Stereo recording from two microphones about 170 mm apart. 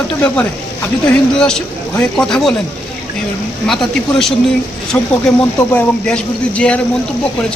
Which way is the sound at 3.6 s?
Centre (ahead or behind).